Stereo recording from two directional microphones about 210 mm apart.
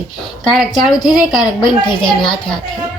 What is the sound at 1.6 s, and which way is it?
Speech, 20° left (ahead or behind).